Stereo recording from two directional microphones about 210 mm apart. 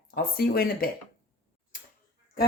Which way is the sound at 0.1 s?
45° left (ahead or behind).